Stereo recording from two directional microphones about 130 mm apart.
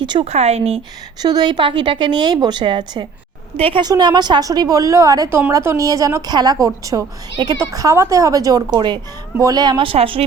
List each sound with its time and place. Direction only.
0.0 s speech: 35° right (ahead or behind)
0.3 s speech: 55° right (ahead or behind)
1.2 s a woman's voice: 30° right (ahead or behind)